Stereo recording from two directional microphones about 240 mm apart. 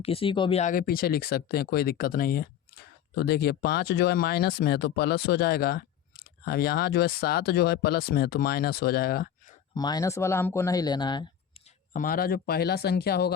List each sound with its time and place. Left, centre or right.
0.0 s speech: left
9.7 s speech: centre
11.9 s speech: left